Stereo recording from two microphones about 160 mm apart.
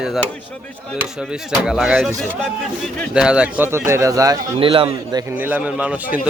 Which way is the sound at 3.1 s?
5° right (ahead or behind).